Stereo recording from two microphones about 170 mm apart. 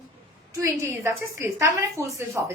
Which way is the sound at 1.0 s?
15° right (ahead or behind).